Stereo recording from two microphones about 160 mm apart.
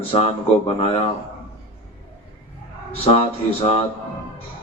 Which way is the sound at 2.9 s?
40° left (ahead or behind).